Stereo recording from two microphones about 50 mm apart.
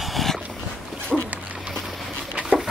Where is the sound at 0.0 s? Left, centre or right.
Centre.